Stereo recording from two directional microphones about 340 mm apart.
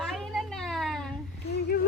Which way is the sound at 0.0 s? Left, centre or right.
Centre.